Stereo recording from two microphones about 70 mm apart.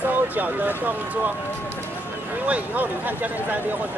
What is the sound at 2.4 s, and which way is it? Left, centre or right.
Speech, right.